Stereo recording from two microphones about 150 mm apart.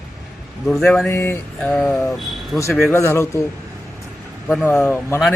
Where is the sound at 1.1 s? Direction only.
15° left (ahead or behind); by 2.7 s centre (ahead or behind).